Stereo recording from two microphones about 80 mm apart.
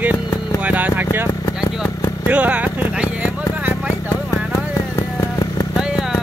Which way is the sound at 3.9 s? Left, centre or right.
Left.